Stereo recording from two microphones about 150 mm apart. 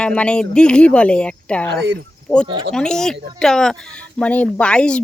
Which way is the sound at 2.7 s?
5° left (ahead or behind).